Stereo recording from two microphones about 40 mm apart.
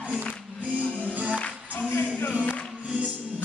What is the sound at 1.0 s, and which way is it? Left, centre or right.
Music, right.